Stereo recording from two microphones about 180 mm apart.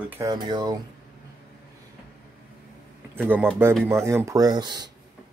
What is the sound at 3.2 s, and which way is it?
Speech, 10° right (ahead or behind).